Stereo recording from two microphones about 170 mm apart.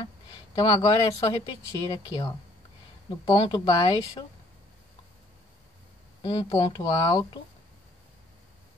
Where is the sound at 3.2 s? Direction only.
25° left (ahead or behind).